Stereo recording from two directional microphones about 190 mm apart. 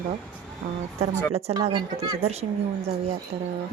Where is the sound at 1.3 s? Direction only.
35° right (ahead or behind).